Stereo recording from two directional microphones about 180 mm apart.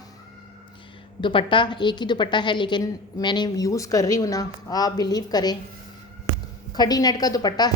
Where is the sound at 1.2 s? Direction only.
30° left (ahead or behind).